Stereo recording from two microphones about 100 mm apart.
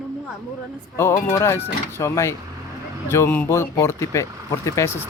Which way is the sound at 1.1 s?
30° left (ahead or behind).